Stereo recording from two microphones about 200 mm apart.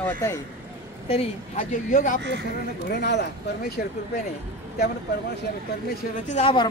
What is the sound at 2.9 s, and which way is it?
Speech, 60° left (ahead or behind).